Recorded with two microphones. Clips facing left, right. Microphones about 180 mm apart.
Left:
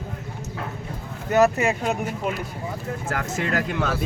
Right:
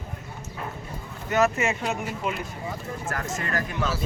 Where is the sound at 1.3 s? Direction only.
35° left (ahead or behind).